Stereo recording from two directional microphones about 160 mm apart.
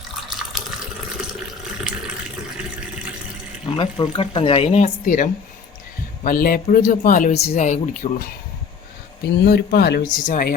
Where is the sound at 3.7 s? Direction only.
30° left (ahead or behind); by 5.3 s 50° left (ahead or behind).